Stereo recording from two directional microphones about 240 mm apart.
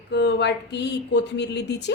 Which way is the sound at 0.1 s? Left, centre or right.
Left.